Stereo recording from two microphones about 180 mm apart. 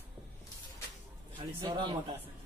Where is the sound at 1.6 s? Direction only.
25° right (ahead or behind).